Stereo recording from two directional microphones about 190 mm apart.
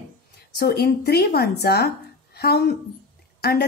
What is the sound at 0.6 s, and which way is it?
A woman's voice, 55° left (ahead or behind).